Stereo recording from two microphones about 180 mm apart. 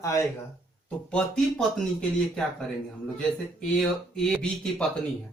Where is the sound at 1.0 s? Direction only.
5° left (ahead or behind).